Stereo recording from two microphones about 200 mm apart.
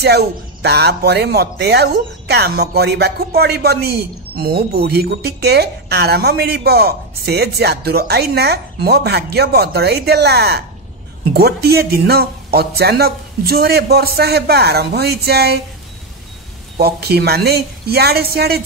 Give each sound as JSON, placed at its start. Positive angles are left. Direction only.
{"t": 0.0, "sound": "a woman's voice", "side_deg": -55}
{"t": 16.7, "sound": "a woman's voice", "side_deg": -50}